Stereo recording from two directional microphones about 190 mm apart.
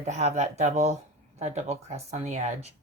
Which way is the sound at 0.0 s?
35° right (ahead or behind).